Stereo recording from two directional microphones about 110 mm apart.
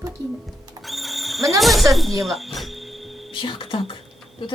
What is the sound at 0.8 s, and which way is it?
Music, centre (ahead or behind).